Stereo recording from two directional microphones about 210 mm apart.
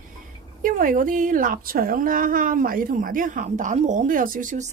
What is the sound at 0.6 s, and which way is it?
A woman's voice, 40° right (ahead or behind).